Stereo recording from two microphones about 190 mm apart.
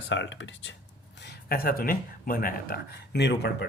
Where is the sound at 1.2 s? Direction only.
55° left (ahead or behind).